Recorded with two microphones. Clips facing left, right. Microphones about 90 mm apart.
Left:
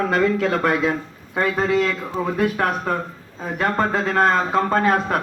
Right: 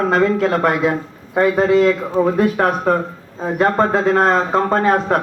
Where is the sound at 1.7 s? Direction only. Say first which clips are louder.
Right 7 dB; 25° right (ahead or behind).